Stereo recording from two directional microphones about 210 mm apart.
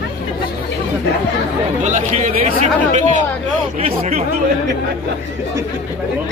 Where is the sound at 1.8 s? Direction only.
35° right (ahead or behind).